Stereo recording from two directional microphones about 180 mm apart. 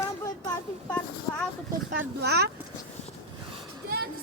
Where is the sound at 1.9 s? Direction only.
65° right (ahead or behind).